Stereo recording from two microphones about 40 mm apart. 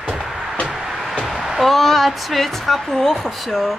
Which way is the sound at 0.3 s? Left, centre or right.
Centre.